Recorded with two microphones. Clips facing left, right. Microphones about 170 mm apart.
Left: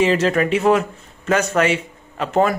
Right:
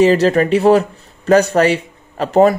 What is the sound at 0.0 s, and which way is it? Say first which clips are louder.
A man's voice: right 5 dB; 35° right (ahead or behind).